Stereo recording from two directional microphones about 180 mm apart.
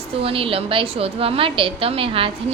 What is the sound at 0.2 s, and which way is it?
Speech, 30° right (ahead or behind).